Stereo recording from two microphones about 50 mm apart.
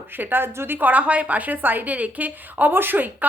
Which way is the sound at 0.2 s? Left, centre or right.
Right.